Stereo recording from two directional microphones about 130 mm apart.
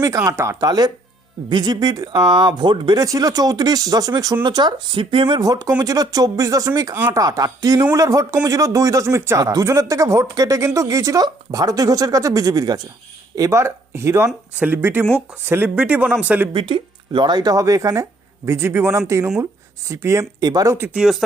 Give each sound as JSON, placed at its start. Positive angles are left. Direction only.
{"t": 0.3, "sound": "speech", "side_deg": -25}
{"t": 5.4, "sound": "speech", "side_deg": -30}
{"t": 16.5, "sound": "speech", "side_deg": -40}
{"t": 20.7, "sound": "speech", "side_deg": -15}
{"t": 21.0, "sound": "speech", "side_deg": 0}